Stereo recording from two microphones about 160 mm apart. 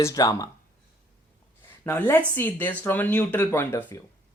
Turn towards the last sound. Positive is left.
turn(degrees=15)  # may be behind; listen again after turning